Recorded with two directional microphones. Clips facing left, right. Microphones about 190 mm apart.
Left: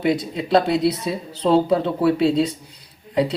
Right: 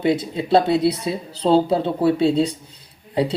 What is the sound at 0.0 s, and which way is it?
Speech, 30° right (ahead or behind).